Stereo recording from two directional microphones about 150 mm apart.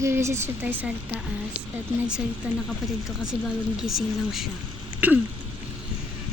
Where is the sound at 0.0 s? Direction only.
20° right (ahead or behind).